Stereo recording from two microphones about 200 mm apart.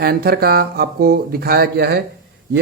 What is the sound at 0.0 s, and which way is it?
Speech, 50° right (ahead or behind).